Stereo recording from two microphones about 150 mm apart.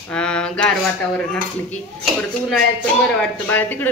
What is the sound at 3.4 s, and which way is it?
Speech, 10° left (ahead or behind).